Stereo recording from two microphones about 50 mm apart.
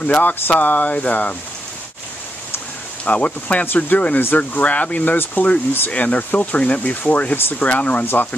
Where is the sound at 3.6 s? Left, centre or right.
Left.